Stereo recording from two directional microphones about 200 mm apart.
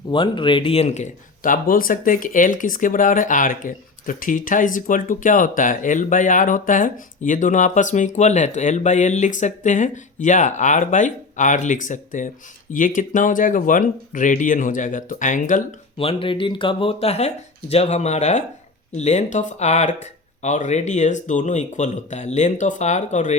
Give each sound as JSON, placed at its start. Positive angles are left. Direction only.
{"t": 0.1, "sound": "speech", "side_deg": 25}
{"t": 16.0, "sound": "speech", "side_deg": 25}